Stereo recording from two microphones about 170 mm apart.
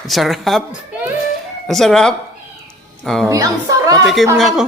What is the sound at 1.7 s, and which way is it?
Speech, centre (ahead or behind).